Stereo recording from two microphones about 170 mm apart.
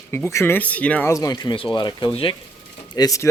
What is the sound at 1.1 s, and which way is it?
Speech, 20° left (ahead or behind).